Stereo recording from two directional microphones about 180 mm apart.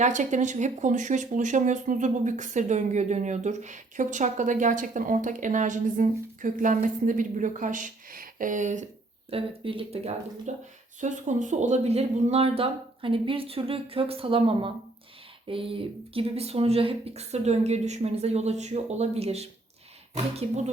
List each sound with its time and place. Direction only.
0.0 s speech: 40° right (ahead or behind)
9.3 s speech: 30° right (ahead or behind)